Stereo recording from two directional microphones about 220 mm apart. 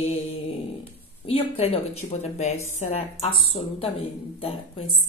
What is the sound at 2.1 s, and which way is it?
A woman's voice, 30° left (ahead or behind).